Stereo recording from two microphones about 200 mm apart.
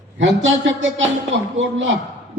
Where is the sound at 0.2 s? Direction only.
70° right (ahead or behind).